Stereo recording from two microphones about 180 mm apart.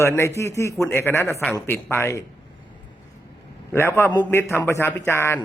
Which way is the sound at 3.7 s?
15° left (ahead or behind).